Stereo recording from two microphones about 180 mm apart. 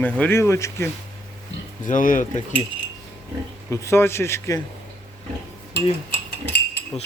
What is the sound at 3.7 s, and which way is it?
Speech, 15° left (ahead or behind).